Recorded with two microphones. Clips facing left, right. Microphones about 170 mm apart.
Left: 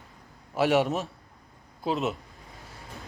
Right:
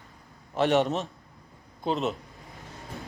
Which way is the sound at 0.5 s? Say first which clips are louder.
Even; 10° left (ahead or behind).